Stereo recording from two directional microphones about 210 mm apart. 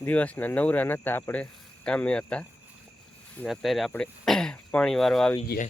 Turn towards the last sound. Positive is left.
turn(degrees=45)  # may be behind; listen again after turning